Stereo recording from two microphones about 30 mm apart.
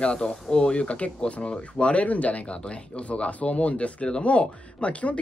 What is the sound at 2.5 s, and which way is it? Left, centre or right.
Speech, left.